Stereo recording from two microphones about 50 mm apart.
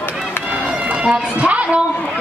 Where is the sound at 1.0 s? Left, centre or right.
Right.